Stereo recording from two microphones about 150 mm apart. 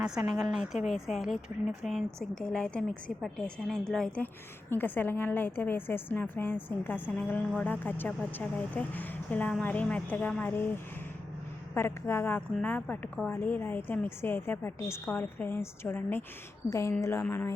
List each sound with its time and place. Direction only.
0.0 s a woman's voice: 5° right (ahead or behind); by 10.7 s 10° left (ahead or behind)
11.7 s a woman's voice: 15° left (ahead or behind)